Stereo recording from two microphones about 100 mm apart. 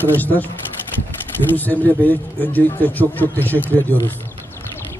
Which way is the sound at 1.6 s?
15° left (ahead or behind).